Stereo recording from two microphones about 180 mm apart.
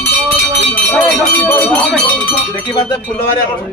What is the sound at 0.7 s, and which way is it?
Cowbell, 10° left (ahead or behind).